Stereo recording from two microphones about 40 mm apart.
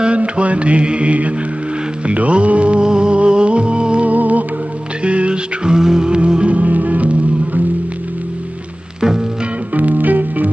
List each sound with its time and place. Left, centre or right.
0.0 s mantra: right
2.8 s music: right
4.1 s music: right
5.0 s music: right
9.8 s music: right